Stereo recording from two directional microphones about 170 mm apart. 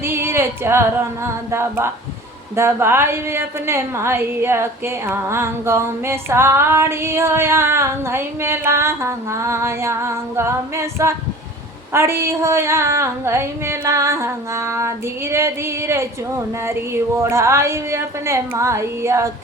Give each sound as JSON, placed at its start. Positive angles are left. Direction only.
{"t": 0.0, "sound": "singing", "side_deg": -15}
{"t": 2.6, "sound": "a woman's voice", "side_deg": -15}